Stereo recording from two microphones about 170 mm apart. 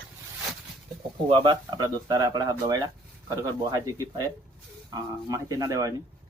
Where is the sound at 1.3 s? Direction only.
30° right (ahead or behind).